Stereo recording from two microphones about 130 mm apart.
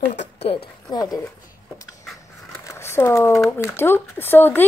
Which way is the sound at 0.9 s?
30° left (ahead or behind).